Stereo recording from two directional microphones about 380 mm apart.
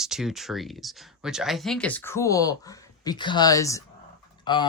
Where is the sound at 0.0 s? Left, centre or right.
Centre.